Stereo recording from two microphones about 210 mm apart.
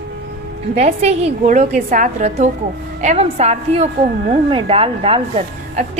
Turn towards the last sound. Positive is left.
turn(degrees=-30)  # may be behind; listen again after turning